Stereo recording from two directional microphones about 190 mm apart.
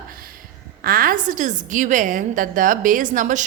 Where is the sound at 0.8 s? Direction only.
50° right (ahead or behind).